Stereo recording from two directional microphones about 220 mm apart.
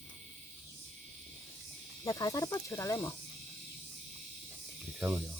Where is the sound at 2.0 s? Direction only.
15° left (ahead or behind).